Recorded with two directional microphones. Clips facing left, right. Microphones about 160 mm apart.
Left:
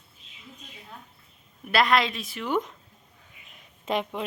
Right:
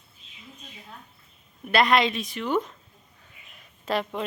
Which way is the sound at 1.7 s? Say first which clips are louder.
Right 2 dB; centre (ahead or behind).